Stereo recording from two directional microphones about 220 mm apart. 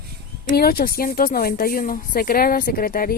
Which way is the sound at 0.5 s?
40° left (ahead or behind).